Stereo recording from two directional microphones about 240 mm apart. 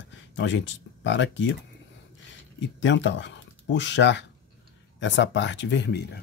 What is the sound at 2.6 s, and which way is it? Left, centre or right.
Speech, left.